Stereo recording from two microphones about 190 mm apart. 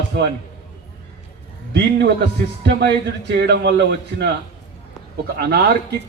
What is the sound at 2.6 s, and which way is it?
A man's voice, 60° right (ahead or behind).